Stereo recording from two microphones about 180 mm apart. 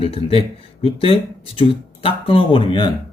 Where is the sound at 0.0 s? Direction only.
30° left (ahead or behind).